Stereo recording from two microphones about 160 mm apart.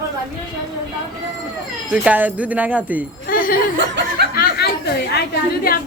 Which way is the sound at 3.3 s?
60° left (ahead or behind).